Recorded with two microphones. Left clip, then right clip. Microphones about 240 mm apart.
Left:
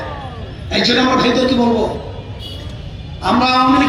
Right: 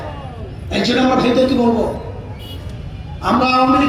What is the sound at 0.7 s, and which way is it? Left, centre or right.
A man's voice, right.